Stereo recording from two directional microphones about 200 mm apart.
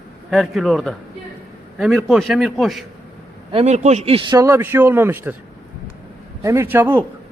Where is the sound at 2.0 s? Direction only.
Centre (ahead or behind).